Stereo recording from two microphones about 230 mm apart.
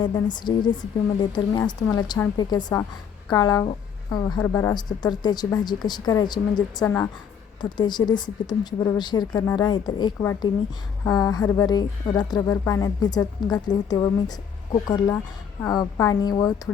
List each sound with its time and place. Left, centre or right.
0.0 s speech: centre